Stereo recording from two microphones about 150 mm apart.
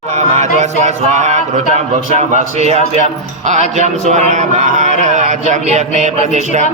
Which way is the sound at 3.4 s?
55° right (ahead or behind).